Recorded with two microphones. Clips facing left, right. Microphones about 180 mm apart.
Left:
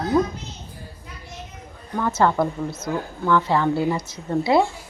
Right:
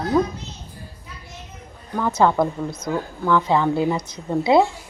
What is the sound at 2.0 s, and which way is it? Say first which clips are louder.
A woman's voice: right 2 dB; 15° right (ahead or behind).